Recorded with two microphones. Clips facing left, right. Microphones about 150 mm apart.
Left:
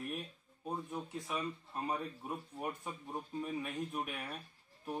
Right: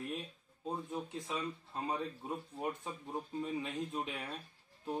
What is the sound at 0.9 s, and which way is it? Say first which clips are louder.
Speech: right 1 dB; 20° right (ahead or behind).